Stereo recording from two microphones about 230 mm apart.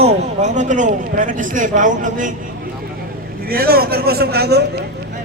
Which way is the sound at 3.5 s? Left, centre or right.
Right.